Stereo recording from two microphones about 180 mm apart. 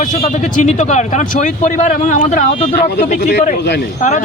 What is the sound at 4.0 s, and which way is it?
Speech, 45° left (ahead or behind).